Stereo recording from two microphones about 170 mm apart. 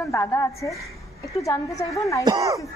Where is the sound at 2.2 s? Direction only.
20° right (ahead or behind).